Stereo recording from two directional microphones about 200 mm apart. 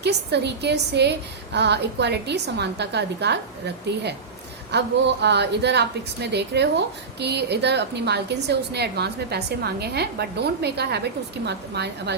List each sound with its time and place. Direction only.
0.0 s a woman's voice: 55° right (ahead or behind)
4.7 s a woman's voice: 60° right (ahead or behind)